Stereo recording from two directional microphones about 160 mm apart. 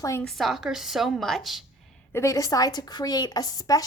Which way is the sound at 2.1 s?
15° left (ahead or behind).